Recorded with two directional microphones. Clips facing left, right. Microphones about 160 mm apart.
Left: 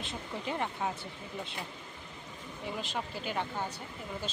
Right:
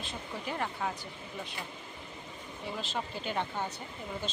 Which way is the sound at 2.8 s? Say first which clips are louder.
Right 2 dB; 10° left (ahead or behind).